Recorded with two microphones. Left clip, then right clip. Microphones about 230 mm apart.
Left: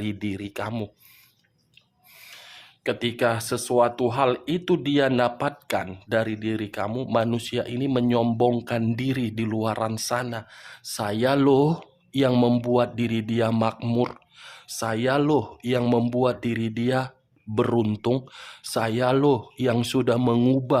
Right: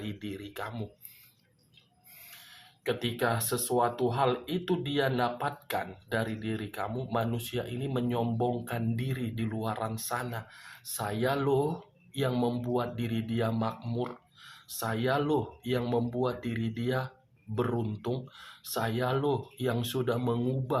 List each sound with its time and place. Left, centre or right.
0.0 s speech: left
2.2 s speech: left